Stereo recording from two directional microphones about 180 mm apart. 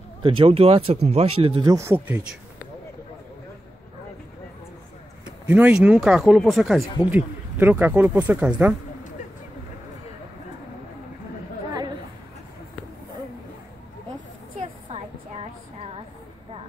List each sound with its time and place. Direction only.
0.2 s speech: 30° right (ahead or behind); by 2.2 s 10° right (ahead or behind)
5.5 s speech: 5° right (ahead or behind)
14.9 s a sound: 35° right (ahead or behind)